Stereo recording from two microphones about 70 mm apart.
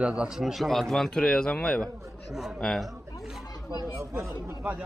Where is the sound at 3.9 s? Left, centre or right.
Right.